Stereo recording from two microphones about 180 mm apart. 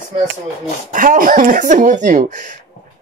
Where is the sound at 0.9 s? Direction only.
50° right (ahead or behind).